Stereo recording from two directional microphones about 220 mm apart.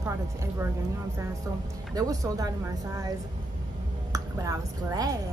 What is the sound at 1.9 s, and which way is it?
Speech, 15° right (ahead or behind).